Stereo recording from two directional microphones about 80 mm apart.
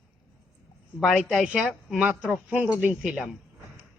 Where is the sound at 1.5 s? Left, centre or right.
Centre.